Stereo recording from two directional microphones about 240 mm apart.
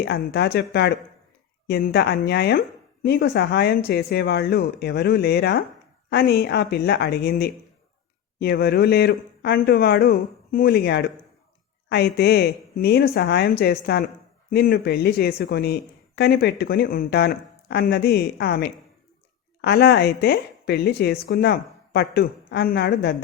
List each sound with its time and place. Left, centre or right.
0.0 s a woman's voice: left